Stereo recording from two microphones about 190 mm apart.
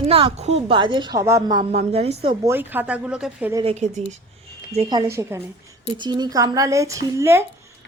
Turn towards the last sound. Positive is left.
turn(degrees=-15)  # may be behind; listen again after turning